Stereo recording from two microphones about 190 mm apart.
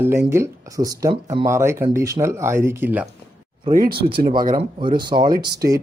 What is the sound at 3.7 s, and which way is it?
Speech, 50° right (ahead or behind).